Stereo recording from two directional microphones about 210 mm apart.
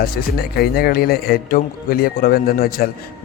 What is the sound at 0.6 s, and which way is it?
Speech, 45° left (ahead or behind).